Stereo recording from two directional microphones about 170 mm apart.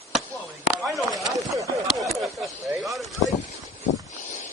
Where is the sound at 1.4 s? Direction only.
20° right (ahead or behind).